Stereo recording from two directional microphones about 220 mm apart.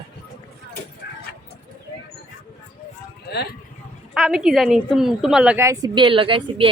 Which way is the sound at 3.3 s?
45° left (ahead or behind).